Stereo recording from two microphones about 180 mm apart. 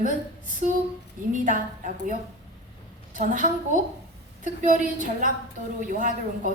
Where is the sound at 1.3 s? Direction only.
45° right (ahead or behind).